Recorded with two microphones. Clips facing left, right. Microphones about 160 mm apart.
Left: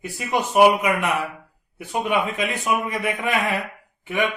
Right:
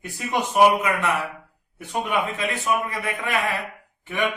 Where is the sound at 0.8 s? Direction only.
15° left (ahead or behind).